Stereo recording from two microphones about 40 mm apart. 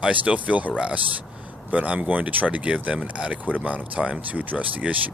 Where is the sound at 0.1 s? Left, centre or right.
Right.